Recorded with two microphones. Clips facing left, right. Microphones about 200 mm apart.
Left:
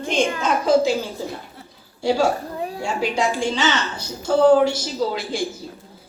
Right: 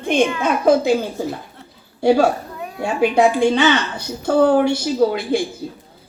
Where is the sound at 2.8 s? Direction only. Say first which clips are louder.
Right 8 dB; 60° right (ahead or behind).